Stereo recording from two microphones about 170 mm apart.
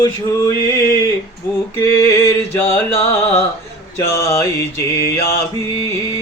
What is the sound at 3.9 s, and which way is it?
Mantra, 15° left (ahead or behind).